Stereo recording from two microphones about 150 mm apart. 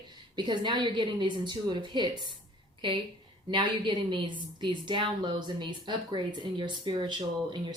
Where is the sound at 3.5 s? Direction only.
30° right (ahead or behind).